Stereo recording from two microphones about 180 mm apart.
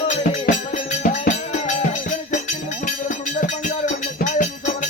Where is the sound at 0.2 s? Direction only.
45° left (ahead or behind).